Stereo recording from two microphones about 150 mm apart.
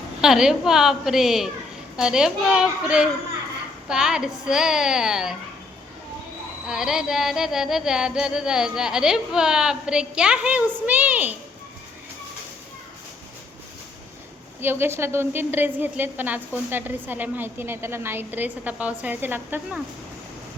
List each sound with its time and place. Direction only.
0.2 s music: 5° right (ahead or behind)
6.7 s music: 5° right (ahead or behind)
14.6 s a woman's voice: 15° right (ahead or behind)